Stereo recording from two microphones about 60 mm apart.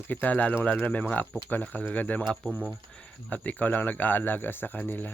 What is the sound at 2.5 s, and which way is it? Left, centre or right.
Speech, right.